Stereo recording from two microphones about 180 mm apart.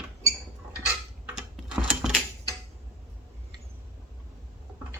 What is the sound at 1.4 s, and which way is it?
Mechanisms, 5° right (ahead or behind).